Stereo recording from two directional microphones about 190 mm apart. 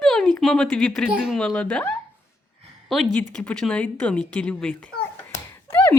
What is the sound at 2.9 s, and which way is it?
Speech, 5° left (ahead or behind).